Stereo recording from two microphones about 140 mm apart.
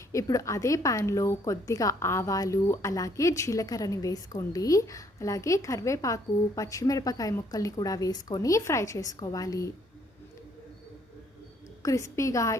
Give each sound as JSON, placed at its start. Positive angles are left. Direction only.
{"t": 0.1, "sound": "a woman's voice", "side_deg": 25}
{"t": 11.8, "sound": "a woman's voice", "side_deg": 25}